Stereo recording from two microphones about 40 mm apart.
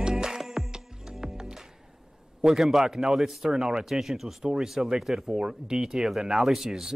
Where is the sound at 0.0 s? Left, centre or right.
Centre.